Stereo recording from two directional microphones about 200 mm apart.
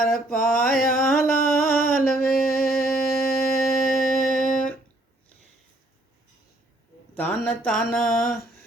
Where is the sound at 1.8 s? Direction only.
45° left (ahead or behind).